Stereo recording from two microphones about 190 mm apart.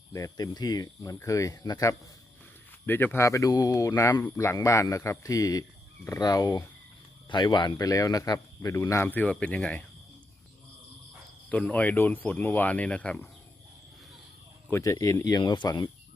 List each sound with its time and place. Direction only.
0.1 s speech: 15° left (ahead or behind)
11.4 s speech: 5° left (ahead or behind)
14.7 s speech: 15° left (ahead or behind)